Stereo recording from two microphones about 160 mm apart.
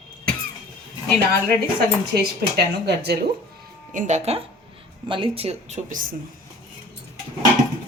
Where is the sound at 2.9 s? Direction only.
90° right.